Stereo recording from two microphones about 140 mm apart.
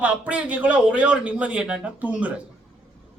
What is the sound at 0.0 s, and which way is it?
A man's voice, 10° right (ahead or behind).